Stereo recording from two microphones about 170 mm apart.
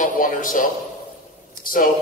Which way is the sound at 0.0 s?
55° left (ahead or behind).